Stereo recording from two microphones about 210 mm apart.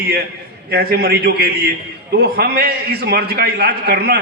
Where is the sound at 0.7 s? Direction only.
50° right (ahead or behind).